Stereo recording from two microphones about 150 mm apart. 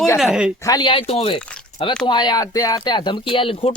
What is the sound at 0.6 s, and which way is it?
Speech, 30° left (ahead or behind).